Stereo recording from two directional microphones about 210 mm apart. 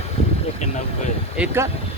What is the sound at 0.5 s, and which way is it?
Speech, 35° left (ahead or behind).